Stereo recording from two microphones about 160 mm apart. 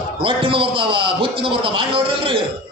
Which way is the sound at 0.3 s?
35° right (ahead or behind).